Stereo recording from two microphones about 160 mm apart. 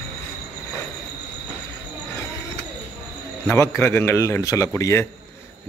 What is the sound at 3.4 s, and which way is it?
Speech, 15° left (ahead or behind).